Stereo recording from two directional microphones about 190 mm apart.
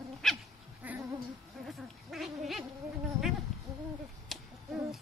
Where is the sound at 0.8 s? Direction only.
10° right (ahead or behind).